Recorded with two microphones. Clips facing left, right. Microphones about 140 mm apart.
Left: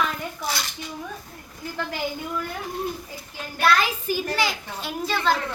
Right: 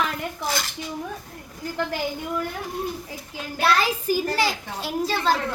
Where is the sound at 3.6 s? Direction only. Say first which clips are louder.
Even; 30° right (ahead or behind).